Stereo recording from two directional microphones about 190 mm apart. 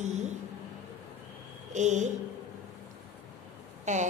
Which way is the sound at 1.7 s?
40° right (ahead or behind).